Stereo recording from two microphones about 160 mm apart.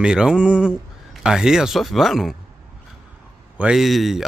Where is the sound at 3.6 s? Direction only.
5° right (ahead or behind).